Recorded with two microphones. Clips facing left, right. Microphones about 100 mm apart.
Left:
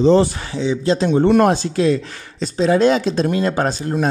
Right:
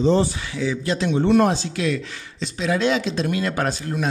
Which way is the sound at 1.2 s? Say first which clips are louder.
Left 2 dB; 55° left (ahead or behind).